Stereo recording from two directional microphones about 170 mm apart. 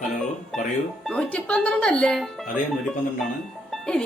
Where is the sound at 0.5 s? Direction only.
Centre (ahead or behind).